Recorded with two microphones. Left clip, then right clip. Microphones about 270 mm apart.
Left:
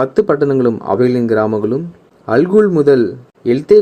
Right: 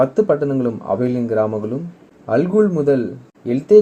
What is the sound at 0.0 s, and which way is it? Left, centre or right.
Speech, left.